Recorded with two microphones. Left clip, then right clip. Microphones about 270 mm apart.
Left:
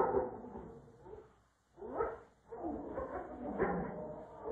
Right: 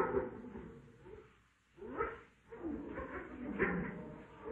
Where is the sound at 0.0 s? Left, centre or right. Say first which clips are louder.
Left 3 dB; left.